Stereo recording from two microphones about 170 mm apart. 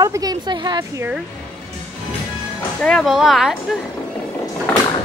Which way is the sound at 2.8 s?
Centre (ahead or behind).